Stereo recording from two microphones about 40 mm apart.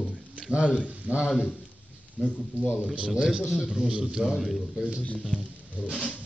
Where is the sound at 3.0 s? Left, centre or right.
Right.